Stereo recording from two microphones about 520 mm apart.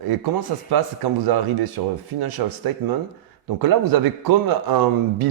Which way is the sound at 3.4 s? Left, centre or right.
Right.